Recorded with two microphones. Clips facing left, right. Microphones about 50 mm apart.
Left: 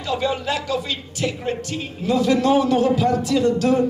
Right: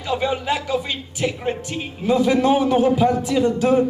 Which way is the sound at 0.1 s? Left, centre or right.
Centre.